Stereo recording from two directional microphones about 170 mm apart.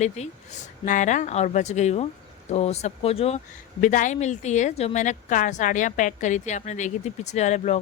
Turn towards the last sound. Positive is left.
turn(degrees=40)  # may be behind; listen again after turning